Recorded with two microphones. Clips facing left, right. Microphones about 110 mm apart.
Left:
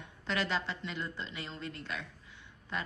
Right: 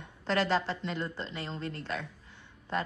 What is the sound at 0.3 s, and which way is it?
A woman's voice, 35° right (ahead or behind).